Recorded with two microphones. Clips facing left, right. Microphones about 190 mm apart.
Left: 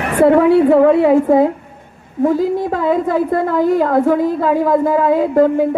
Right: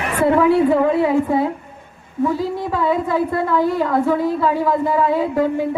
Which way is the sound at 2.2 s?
45° left (ahead or behind).